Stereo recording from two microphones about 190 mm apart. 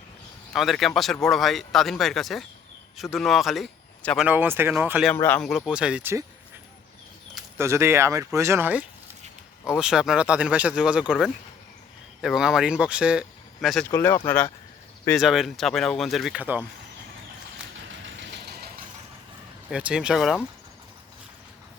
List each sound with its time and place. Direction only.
0.5 s a man's voice: centre (ahead or behind)
4.3 s speech: 10° right (ahead or behind)
5.1 s speech: 10° left (ahead or behind); by 6.2 s 10° right (ahead or behind)
7.6 s speech: 15° right (ahead or behind)
12.2 s speech: 5° right (ahead or behind)
13.8 s speech: 15° left (ahead or behind)
15.1 s speech: centre (ahead or behind)
17.7 s vehicle: 75° right (ahead or behind)
19.7 s speech: 5° right (ahead or behind)